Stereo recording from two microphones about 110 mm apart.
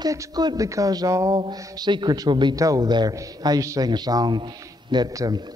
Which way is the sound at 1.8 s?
40° right (ahead or behind).